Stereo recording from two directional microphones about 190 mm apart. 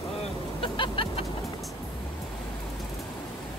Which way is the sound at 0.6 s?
25° left (ahead or behind).